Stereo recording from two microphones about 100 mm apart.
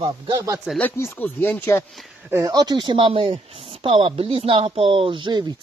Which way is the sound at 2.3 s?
35° right (ahead or behind).